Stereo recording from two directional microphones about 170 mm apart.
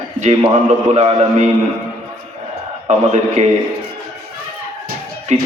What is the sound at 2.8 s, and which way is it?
Speech, 40° right (ahead or behind).